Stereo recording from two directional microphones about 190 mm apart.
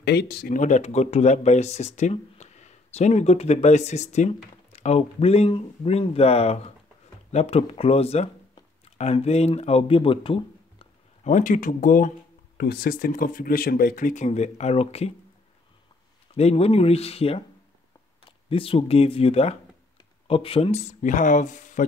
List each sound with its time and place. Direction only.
0.0 s speech: 60° left (ahead or behind)
0.6 s speech: 40° left (ahead or behind)
16.3 s speech: 35° left (ahead or behind)